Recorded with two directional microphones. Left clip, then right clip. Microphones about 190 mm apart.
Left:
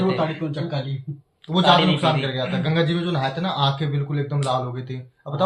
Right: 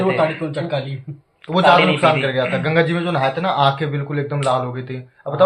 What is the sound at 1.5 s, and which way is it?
A man's voice, 5° right (ahead or behind).